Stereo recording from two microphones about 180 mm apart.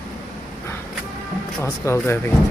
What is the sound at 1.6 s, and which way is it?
Speech, 15° left (ahead or behind).